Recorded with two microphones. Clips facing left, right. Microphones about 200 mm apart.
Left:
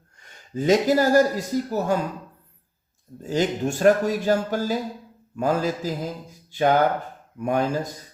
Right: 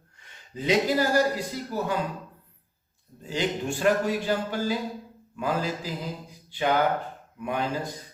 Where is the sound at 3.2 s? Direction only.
45° left (ahead or behind).